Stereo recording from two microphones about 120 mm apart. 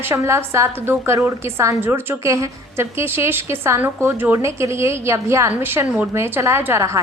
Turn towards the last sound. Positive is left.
turn(degrees=-25)  # may be behind; listen again after turning